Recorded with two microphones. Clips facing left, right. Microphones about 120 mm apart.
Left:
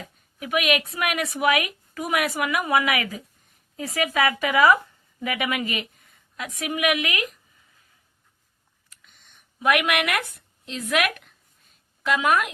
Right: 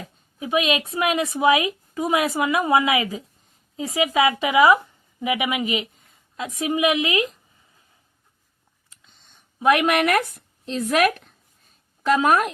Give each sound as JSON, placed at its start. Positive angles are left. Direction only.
{"t": 0.3, "sound": "a woman's voice", "side_deg": -25}
{"t": 8.9, "sound": "a sound", "side_deg": -25}
{"t": 10.3, "sound": "a woman's voice", "side_deg": -35}